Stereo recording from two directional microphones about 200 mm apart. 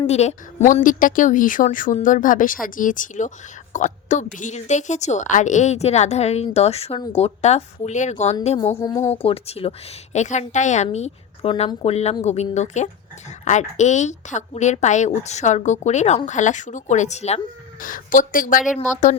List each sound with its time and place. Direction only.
0.1 s speech: 35° left (ahead or behind)
8.7 s speech: 15° left (ahead or behind)
9.1 s speech: 30° left (ahead or behind)